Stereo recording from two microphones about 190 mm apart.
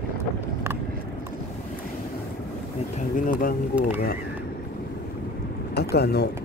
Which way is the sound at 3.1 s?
45° left (ahead or behind).